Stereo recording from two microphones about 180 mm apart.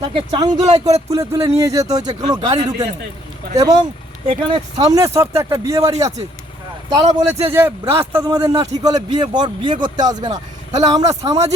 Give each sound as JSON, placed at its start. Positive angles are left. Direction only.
{"t": 0.0, "sound": "speech", "side_deg": -30}
{"t": 4.8, "sound": "speech", "side_deg": -20}
{"t": 6.9, "sound": "speech", "side_deg": -20}